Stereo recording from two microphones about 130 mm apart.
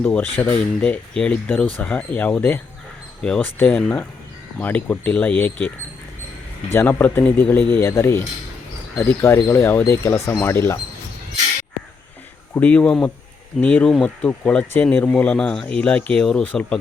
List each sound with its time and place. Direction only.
0.0 s speech: 15° left (ahead or behind)
6.7 s speech: 15° left (ahead or behind)
12.5 s speech: 10° left (ahead or behind)